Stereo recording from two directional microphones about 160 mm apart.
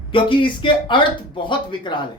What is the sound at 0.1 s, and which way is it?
Speech, 30° left (ahead or behind).